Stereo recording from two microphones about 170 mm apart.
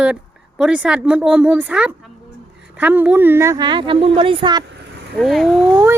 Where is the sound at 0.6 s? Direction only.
5° right (ahead or behind); by 4.6 s 30° right (ahead or behind).